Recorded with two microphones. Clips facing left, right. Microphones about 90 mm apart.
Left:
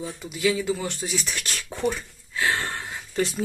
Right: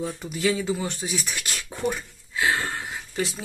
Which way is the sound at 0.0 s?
40° right (ahead or behind).